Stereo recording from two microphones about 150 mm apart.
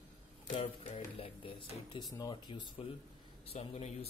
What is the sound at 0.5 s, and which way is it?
Speech, 40° left (ahead or behind).